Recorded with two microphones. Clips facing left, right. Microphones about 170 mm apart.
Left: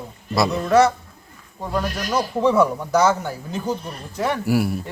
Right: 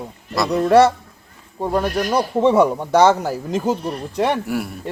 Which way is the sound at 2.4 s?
25° right (ahead or behind).